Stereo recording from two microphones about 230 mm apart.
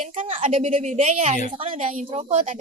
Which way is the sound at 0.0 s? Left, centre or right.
Right.